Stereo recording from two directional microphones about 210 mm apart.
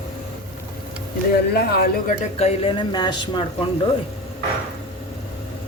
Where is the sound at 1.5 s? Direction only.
45° left (ahead or behind).